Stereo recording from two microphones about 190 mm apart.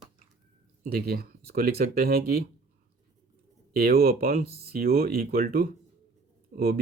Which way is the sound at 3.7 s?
50° right (ahead or behind).